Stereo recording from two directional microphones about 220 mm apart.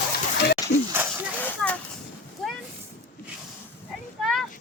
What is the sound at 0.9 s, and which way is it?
Snake, 10° right (ahead or behind).